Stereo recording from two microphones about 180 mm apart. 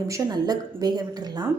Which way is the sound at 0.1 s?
20° right (ahead or behind).